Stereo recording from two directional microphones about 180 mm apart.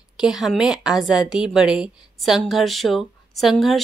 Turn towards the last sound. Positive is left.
turn(degrees=0)  # may be behind; listen again after turning